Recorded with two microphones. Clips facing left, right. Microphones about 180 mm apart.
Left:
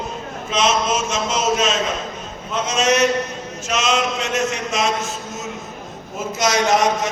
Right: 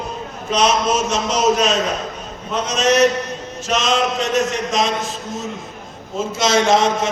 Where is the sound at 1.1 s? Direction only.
35° right (ahead or behind).